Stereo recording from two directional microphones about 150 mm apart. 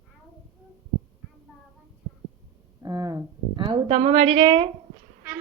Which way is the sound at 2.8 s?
25° right (ahead or behind).